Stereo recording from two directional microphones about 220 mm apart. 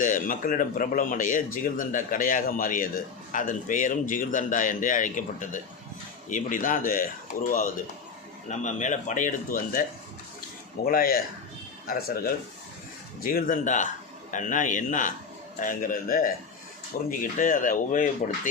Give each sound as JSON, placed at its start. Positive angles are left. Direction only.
{"t": 0.0, "sound": "speech", "side_deg": 40}
{"t": 10.8, "sound": "speech", "side_deg": 40}